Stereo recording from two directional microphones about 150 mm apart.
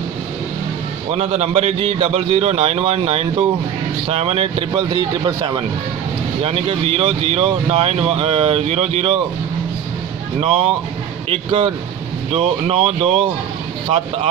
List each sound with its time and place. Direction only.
1.1 s a man's voice: 45° right (ahead or behind); by 5.6 s 30° right (ahead or behind)
6.4 s speech: 40° right (ahead or behind)
10.4 s a man's voice: 45° right (ahead or behind)